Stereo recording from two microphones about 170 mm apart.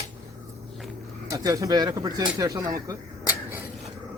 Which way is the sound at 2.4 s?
20° right (ahead or behind).